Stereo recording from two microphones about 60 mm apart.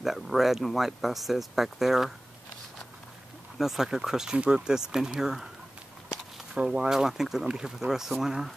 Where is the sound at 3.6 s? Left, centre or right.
Centre.